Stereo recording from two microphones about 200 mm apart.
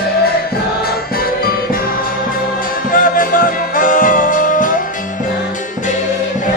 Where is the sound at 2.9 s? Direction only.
45° left (ahead or behind).